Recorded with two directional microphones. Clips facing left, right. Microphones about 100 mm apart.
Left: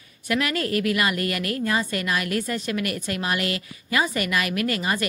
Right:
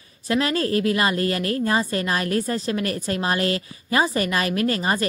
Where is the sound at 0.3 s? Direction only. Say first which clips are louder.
Right 3 dB; 30° right (ahead or behind).